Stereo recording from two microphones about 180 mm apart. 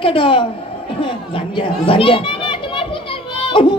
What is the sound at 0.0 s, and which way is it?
Speech, 30° left (ahead or behind).